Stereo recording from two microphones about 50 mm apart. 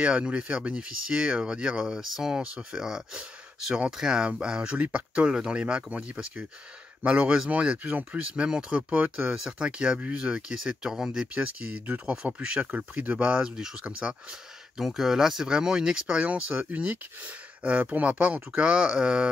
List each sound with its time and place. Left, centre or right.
0.0 s speech: right
4.7 s speech: right
9.3 s speech: centre
12.2 s speech: centre
12.7 s speech: right
14.8 s speech: centre
16.3 s speech: right